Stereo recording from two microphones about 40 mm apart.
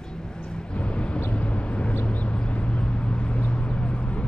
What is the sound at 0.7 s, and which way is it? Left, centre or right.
Vehicle, left.